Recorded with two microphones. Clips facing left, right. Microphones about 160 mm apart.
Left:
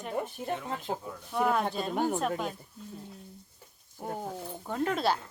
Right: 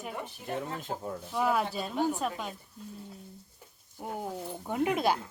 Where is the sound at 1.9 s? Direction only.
50° left (ahead or behind).